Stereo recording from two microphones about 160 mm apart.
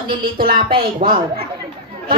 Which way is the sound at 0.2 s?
70° right (ahead or behind).